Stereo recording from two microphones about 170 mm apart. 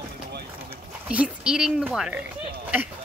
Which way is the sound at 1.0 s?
10° right (ahead or behind).